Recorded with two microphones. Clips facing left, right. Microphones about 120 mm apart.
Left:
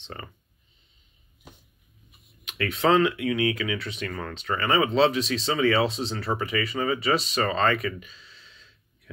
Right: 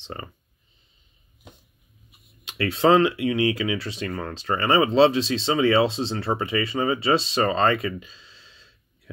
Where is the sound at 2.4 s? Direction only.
30° right (ahead or behind).